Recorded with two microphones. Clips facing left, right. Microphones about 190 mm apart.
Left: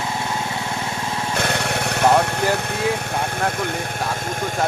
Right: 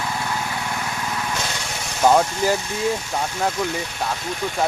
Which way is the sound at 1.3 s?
60° left (ahead or behind).